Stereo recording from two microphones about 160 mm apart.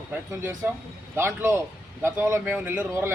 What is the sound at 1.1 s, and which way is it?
A man's voice, 15° right (ahead or behind).